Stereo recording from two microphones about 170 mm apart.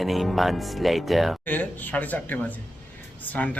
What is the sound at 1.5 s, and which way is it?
Speech, 10° left (ahead or behind).